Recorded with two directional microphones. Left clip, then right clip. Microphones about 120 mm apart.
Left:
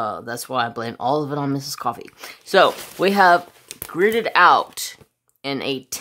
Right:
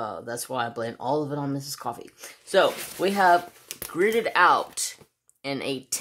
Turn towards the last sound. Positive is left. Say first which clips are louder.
# left 5 dB
turn(degrees=30)  # may be behind; listen again after turning